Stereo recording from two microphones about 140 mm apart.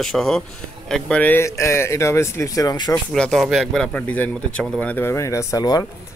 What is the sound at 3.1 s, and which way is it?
Speech, 5° left (ahead or behind).